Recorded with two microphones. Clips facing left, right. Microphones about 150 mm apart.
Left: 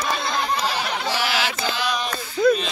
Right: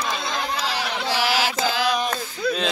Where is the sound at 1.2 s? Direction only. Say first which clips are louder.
Right 2 dB; 40° right (ahead or behind).